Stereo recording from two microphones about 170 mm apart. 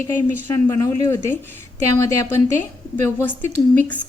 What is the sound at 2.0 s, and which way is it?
A woman's voice, 15° left (ahead or behind).